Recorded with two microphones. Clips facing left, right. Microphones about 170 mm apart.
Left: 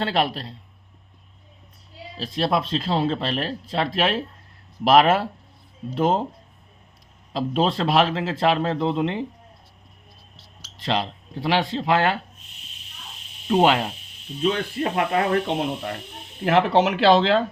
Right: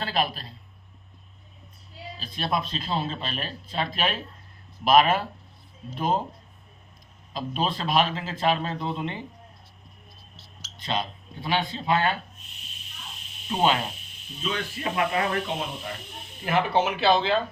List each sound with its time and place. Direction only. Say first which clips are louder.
0.0 s a man's voice: left 5 dB; 70° left (ahead or behind)
2.1 s speech: left 6 dB; 85° left
7.3 s speech: left 7 dB; 85° left
10.8 s speech: left 5 dB; 80° left
14.4 s speech: left 7 dB; 50° left (ahead or behind)
16.4 s speech: left 5 dB; 80° left